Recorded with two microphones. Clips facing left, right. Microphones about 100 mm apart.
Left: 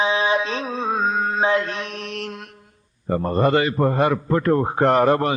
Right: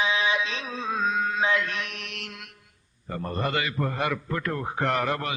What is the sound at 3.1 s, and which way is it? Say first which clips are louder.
A man's voice: left 10 dB; 35° left (ahead or behind).